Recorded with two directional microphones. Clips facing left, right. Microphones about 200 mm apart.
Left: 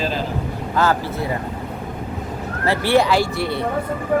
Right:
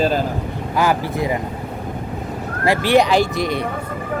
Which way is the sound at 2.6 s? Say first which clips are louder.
Right 2 dB; 15° right (ahead or behind).